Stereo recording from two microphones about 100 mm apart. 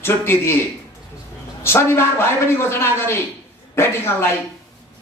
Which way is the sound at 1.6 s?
25° left (ahead or behind).